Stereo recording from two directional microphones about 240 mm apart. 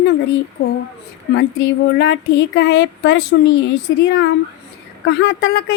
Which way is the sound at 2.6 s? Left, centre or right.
Left.